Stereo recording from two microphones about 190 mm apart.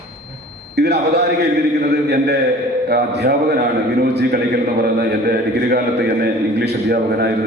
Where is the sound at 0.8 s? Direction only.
60° right (ahead or behind).